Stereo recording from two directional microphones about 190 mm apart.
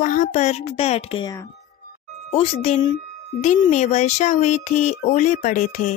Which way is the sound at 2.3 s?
30° left (ahead or behind).